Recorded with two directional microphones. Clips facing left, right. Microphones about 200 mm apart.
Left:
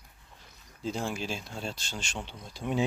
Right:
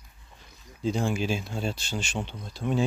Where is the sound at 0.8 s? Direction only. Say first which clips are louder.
Right 6 dB; centre (ahead or behind).